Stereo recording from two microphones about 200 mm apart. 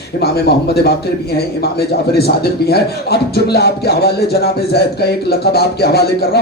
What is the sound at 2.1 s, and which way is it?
Speech, 55° left (ahead or behind).